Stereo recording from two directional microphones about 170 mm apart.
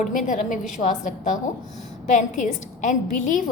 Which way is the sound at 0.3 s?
50° left (ahead or behind).